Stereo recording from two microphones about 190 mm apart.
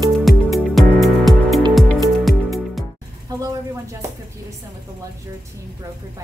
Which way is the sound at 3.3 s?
20° right (ahead or behind).